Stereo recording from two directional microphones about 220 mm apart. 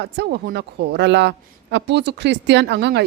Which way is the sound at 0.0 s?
50° right (ahead or behind).